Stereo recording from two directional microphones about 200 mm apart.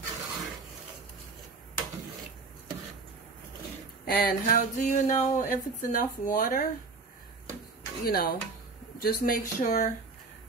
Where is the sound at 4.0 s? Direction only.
45° left (ahead or behind).